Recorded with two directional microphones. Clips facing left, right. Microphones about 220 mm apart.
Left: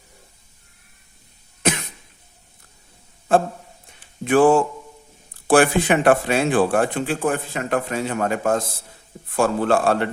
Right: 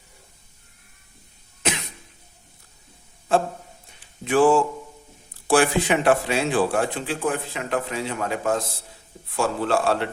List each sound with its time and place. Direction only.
4.2 s speech: 55° left (ahead or behind)